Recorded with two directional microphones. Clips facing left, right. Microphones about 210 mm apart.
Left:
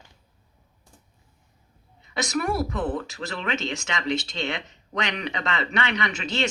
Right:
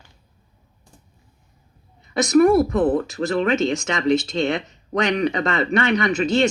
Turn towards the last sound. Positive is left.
turn(degrees=-45)  # may be behind; listen again after turning